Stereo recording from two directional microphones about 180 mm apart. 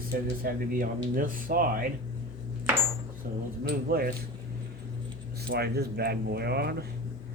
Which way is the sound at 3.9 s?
55° right (ahead or behind).